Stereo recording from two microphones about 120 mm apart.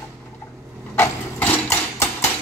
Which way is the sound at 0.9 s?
15° left (ahead or behind).